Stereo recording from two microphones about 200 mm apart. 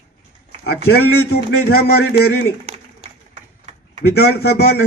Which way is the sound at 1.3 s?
50° left (ahead or behind).